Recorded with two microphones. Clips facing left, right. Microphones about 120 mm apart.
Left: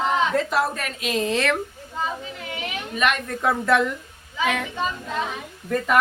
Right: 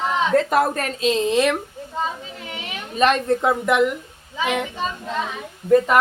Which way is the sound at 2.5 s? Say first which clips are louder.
Right 4 dB; 35° right (ahead or behind).